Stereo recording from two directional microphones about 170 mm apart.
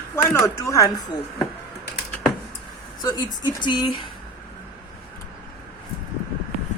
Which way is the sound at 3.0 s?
25° left (ahead or behind).